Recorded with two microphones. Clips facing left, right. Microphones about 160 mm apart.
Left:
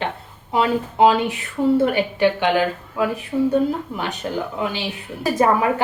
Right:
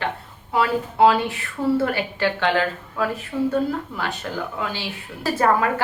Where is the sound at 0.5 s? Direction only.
20° left (ahead or behind).